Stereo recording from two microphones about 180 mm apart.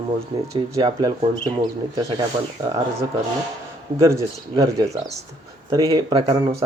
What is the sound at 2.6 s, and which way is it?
Speech, 20° right (ahead or behind).